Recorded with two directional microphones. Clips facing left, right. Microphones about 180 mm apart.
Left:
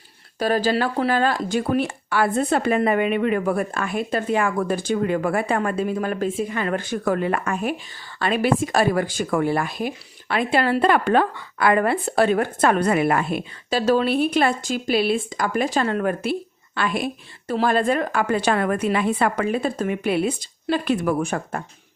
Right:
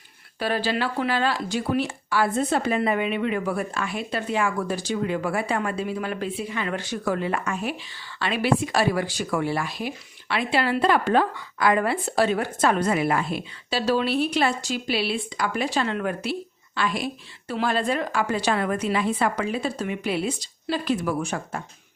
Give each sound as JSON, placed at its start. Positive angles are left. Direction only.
{"t": 0.3, "sound": "a woman's voice", "side_deg": 40}